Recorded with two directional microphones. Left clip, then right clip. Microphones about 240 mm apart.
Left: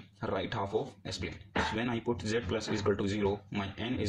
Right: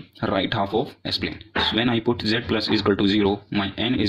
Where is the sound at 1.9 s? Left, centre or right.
Right.